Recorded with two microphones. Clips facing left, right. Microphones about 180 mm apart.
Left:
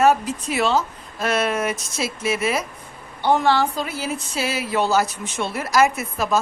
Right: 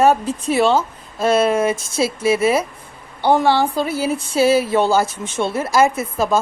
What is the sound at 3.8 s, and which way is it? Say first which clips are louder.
Speech: right 7 dB; 30° right (ahead or behind).